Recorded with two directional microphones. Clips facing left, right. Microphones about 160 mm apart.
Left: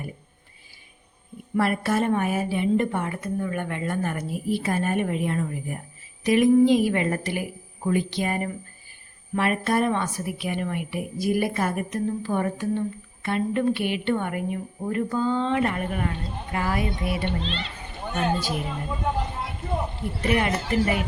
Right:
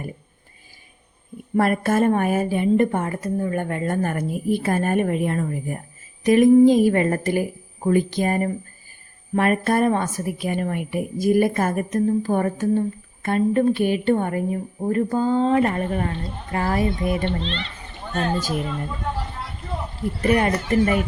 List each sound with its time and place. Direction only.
1.5 s a woman's voice: 45° right (ahead or behind)
17.2 s a child's voice: 5° left (ahead or behind)
18.0 s speech: 15° left (ahead or behind)
18.7 s a sound: 15° left (ahead or behind)
20.2 s a woman's voice: 40° right (ahead or behind)